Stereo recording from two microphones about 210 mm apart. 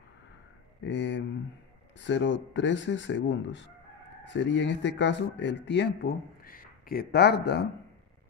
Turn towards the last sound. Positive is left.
turn(degrees=50)  # may be behind; listen again after turning